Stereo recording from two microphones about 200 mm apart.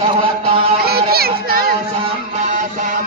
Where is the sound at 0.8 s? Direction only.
50° right (ahead or behind).